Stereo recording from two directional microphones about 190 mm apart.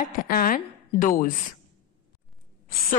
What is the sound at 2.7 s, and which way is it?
Speech, 50° left (ahead or behind).